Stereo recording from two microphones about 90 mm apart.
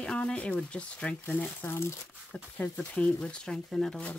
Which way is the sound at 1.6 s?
30° left (ahead or behind).